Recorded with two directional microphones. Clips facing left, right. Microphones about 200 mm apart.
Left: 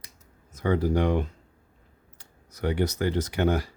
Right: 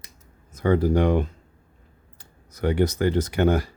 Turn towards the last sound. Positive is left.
turn(degrees=-55)  # may be behind; listen again after turning